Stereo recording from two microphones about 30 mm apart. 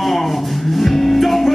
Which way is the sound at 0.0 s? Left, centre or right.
Centre.